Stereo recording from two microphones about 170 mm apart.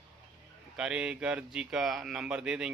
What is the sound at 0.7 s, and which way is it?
Speech, 5° right (ahead or behind).